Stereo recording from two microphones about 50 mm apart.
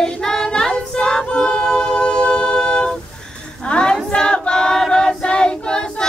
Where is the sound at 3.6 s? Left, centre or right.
Centre.